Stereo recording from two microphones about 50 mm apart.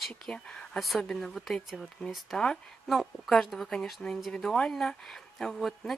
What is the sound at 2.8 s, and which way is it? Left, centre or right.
Speech, centre.